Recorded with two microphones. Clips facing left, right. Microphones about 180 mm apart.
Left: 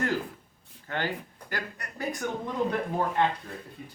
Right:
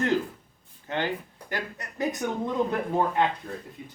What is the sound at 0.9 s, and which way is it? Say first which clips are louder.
Speech: right 3 dB; 20° right (ahead or behind).